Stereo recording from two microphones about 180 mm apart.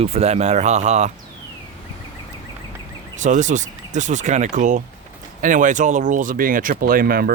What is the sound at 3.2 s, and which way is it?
Speech, 45° right (ahead or behind).